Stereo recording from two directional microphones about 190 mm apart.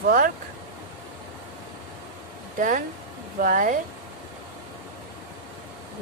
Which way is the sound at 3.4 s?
45° right (ahead or behind).